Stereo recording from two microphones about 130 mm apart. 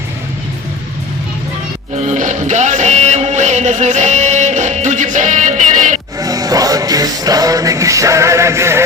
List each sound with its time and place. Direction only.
2.0 s music: 70° right (ahead or behind)
6.1 s music: 25° right (ahead or behind)